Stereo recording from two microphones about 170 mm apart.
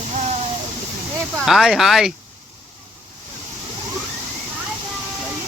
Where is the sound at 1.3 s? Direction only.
Centre (ahead or behind).